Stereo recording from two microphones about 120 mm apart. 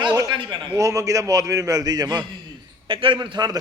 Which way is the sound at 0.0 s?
40° right (ahead or behind).